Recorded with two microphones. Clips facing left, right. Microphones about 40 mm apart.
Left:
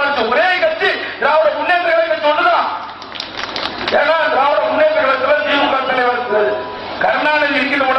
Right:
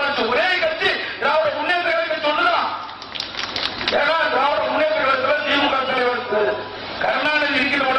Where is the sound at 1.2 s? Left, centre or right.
Left.